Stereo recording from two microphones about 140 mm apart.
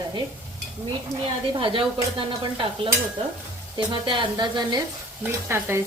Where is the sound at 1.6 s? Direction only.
40° right (ahead or behind).